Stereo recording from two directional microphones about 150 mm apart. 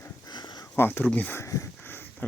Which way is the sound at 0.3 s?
25° left (ahead or behind).